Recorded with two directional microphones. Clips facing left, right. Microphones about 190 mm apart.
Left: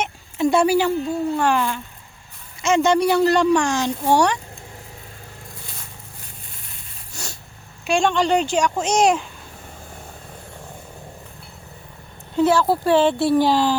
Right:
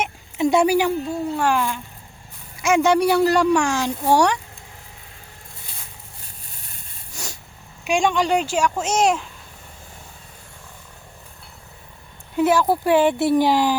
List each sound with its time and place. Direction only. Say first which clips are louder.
0.0 s a sound: even; 15° right (ahead or behind)
1.4 s speech: left 1 dB; 5° right (ahead or behind)
7.1 s spray: even; 15° right (ahead or behind)
7.9 s speech: left 1 dB; 10° right (ahead or behind)
12.4 s speech: left 1 dB; 15° right (ahead or behind)